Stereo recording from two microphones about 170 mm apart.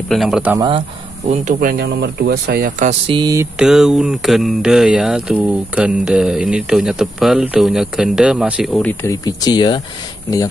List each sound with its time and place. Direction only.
0.1 s speech: centre (ahead or behind)
0.7 s speech: 35° right (ahead or behind); by 2.7 s 65° right (ahead or behind)
2.8 s speech: 40° right (ahead or behind)
3.2 s mantra: 20° right (ahead or behind)
3.5 s speech: 5° right (ahead or behind)
9.0 s speech: 20° left (ahead or behind)